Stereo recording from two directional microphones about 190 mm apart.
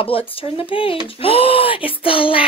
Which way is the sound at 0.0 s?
30° left (ahead or behind).